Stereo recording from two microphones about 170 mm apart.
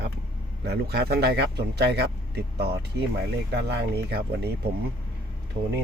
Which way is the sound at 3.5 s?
70° right (ahead or behind).